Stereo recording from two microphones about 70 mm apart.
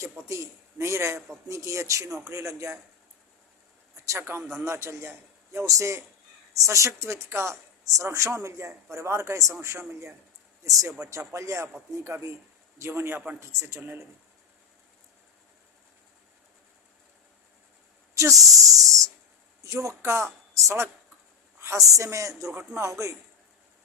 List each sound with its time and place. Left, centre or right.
0.0 s speech: right
3.9 s a sound: right
4.2 s a man's voice: right
18.1 s speech: right